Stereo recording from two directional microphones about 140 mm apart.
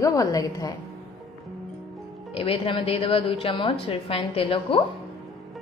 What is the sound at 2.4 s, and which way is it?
A woman's voice, 40° left (ahead or behind).